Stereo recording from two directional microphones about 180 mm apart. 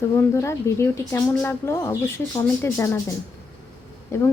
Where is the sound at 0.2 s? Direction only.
15° left (ahead or behind).